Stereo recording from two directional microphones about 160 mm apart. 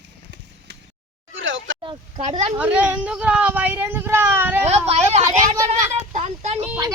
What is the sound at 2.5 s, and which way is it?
Speech, 10° right (ahead or behind).